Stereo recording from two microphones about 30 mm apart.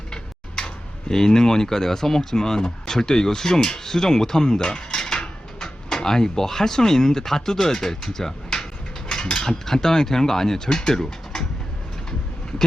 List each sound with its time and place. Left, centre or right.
0.1 s tick-tock: left
2.3 s speech: left